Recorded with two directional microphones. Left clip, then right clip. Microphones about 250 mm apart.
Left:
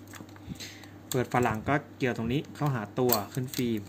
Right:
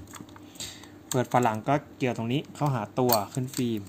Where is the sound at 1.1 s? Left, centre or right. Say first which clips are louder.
Right 3 dB; centre.